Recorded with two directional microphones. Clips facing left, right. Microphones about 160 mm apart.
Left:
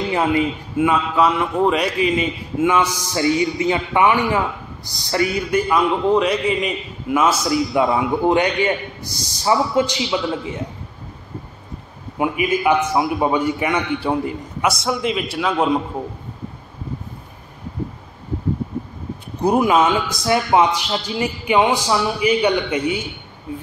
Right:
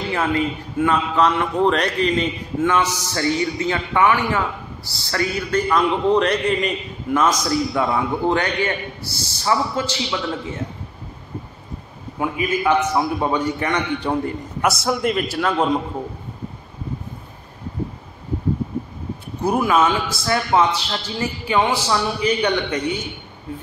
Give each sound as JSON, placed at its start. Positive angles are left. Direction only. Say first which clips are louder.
{"t": 0.1, "sound": "a man's voice", "louder": "left 2 dB", "side_deg": 15}
{"t": 12.2, "sound": "a man's voice", "louder": "left 3 dB", "side_deg": 15}
{"t": 14.6, "sound": "a man's voice", "louder": "even", "side_deg": 0}
{"t": 19.4, "sound": "a man's voice", "louder": "left 2 dB", "side_deg": 20}